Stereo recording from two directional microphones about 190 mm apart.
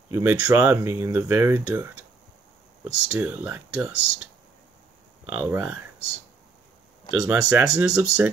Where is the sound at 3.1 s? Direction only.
10° right (ahead or behind).